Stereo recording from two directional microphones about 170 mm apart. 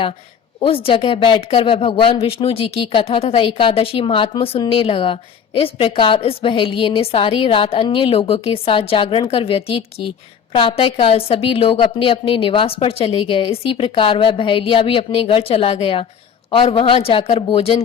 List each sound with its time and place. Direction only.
0.6 s speech: 35° left (ahead or behind)